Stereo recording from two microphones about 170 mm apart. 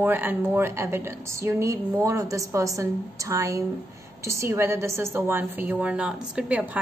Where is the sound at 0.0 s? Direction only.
10° right (ahead or behind).